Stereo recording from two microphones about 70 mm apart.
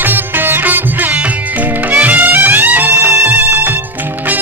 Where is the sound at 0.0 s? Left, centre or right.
Right.